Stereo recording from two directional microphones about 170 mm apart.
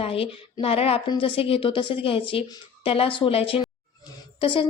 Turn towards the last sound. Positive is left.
turn(degrees=30)  # may be behind; listen again after turning